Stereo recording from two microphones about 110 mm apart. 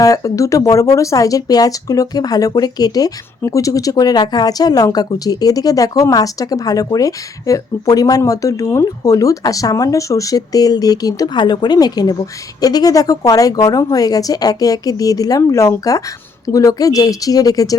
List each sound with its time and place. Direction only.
0.0 s speech: 30° left (ahead or behind)